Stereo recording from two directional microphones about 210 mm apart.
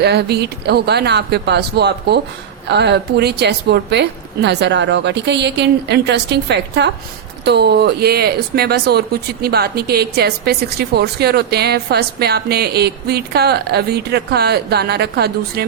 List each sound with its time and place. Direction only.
0.0 s speech: 50° right (ahead or behind)